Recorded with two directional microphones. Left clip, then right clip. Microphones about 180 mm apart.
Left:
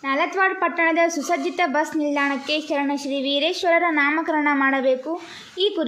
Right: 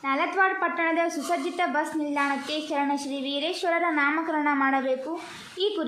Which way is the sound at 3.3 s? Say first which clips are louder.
Left 7 dB; 25° left (ahead or behind).